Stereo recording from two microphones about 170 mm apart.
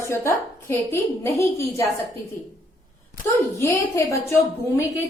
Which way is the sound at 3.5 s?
15° left (ahead or behind).